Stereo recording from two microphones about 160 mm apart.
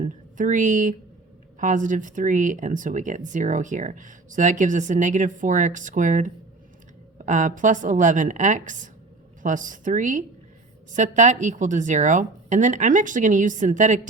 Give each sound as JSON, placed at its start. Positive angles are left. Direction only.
{"t": 0.0, "sound": "a woman's voice", "side_deg": -50}